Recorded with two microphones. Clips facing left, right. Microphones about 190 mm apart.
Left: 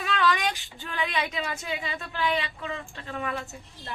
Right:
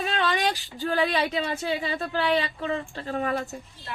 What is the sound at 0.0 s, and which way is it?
Speech, 30° right (ahead or behind).